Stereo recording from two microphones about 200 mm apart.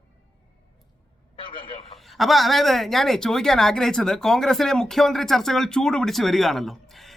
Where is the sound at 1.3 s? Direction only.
25° left (ahead or behind).